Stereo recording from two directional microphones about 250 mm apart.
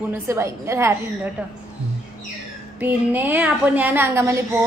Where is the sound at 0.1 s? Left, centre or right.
Centre.